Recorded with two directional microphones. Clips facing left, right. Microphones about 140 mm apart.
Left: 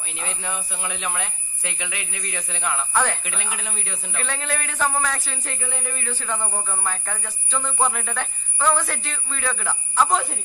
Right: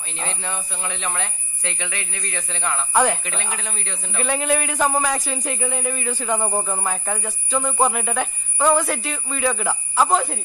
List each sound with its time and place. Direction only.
0.4 s speech: 10° left (ahead or behind)
2.9 s a man's voice: 15° right (ahead or behind)
3.3 s speech: 10° left (ahead or behind)
4.1 s a man's voice: 15° right (ahead or behind)
10.1 s speech: centre (ahead or behind)